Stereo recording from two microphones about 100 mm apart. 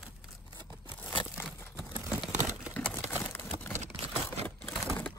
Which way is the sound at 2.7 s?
15° left (ahead or behind).